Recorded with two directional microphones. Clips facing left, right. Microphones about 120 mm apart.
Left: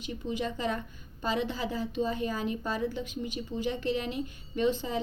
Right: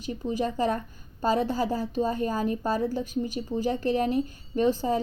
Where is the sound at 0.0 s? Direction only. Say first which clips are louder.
Right 5 dB; 40° right (ahead or behind).